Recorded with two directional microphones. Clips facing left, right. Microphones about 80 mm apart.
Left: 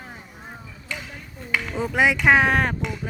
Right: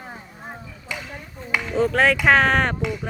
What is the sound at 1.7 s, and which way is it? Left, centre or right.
Speech, centre.